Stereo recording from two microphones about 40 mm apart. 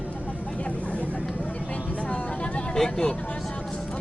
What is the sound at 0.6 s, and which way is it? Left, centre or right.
Vehicle, left.